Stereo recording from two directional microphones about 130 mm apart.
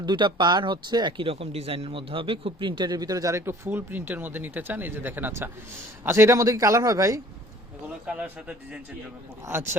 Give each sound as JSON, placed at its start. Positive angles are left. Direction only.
{"t": 0.0, "sound": "a man's voice", "side_deg": -35}
{"t": 8.0, "sound": "a man's voice", "side_deg": -10}